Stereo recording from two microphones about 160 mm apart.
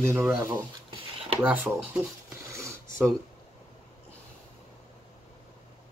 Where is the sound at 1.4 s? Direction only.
10° right (ahead or behind).